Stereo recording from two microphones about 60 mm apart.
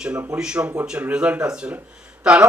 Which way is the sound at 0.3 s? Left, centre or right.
Centre.